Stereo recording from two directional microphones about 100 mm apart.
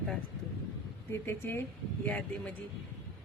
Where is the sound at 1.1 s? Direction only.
25° left (ahead or behind).